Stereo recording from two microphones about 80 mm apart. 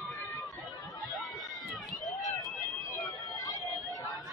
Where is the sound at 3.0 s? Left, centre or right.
Left.